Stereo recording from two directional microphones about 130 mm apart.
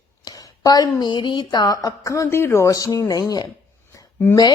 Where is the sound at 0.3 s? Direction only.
30° left (ahead or behind).